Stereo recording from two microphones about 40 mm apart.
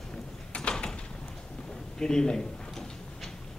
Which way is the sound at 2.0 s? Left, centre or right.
Centre.